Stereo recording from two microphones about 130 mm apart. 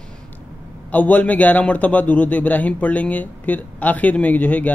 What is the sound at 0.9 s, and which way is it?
A man's voice, 10° left (ahead or behind).